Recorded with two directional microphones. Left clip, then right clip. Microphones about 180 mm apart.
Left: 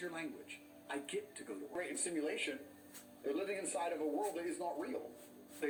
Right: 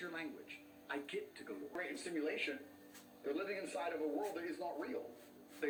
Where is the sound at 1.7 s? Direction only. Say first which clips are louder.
Left 2 dB; 30° left (ahead or behind).